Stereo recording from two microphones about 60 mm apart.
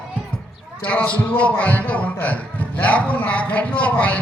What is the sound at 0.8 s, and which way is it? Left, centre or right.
Speech, left.